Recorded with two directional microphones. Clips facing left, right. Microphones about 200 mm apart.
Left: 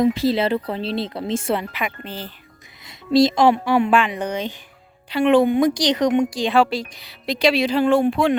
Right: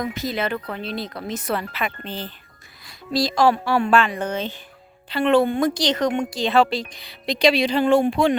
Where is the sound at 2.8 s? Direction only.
20° left (ahead or behind).